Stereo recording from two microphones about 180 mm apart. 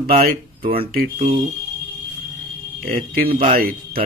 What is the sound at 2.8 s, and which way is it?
Speech, 55° right (ahead or behind).